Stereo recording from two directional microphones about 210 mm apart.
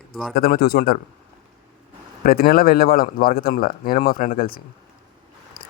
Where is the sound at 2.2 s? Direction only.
45° left (ahead or behind).